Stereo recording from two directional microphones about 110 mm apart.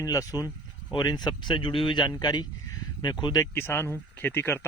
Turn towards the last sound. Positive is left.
turn(degrees=20)  # may be behind; listen again after turning